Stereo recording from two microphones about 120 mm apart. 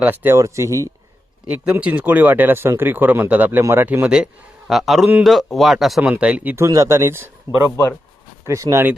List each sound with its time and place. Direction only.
0.0 s a man's voice: 15° right (ahead or behind)
1.7 s speech: 10° right (ahead or behind)
6.0 s speech: 10° right (ahead or behind)
6.7 s a man's voice: 25° right (ahead or behind)